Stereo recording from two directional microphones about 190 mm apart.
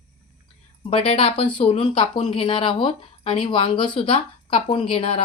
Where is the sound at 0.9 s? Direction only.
30° left (ahead or behind).